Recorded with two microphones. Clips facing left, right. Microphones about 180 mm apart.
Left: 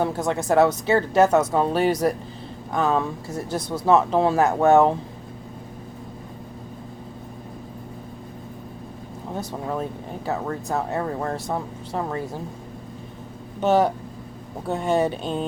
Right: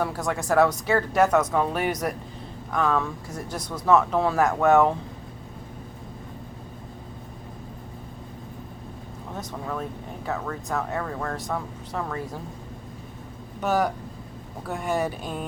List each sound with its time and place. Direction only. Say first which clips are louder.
0.0 s speech: left 4 dB; 25° left (ahead or behind)
9.3 s speech: left 4 dB; 30° left (ahead or behind)
13.6 s speech: left 5 dB; 25° left (ahead or behind)